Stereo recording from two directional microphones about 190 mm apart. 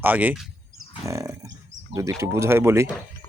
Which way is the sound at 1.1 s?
15° right (ahead or behind).